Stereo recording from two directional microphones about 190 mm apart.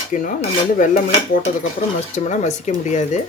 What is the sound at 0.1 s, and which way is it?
Speech, 40° left (ahead or behind).